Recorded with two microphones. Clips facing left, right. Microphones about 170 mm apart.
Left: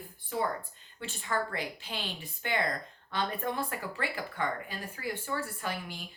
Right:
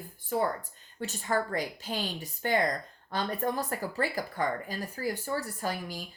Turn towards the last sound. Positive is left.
turn(degrees=-40)  # may be behind; listen again after turning